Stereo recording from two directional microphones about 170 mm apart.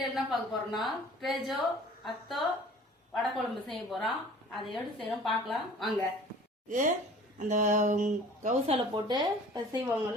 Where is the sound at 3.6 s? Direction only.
Centre (ahead or behind).